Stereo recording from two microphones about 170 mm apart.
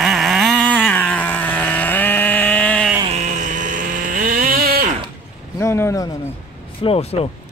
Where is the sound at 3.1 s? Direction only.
45° right (ahead or behind); by 4.8 s 60° right (ahead or behind).